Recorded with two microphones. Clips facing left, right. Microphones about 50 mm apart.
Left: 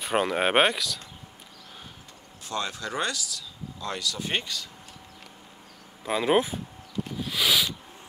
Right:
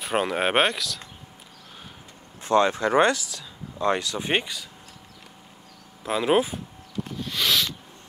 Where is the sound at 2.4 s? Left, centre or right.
Right; by 4.7 s centre.